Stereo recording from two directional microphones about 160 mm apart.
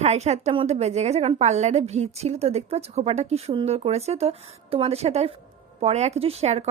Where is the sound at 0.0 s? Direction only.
45° right (ahead or behind).